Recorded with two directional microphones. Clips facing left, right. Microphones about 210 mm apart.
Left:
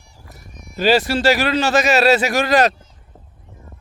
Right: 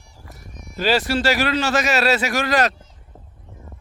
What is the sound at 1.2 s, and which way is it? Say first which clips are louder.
A man's voice: left 3 dB; 30° left (ahead or behind).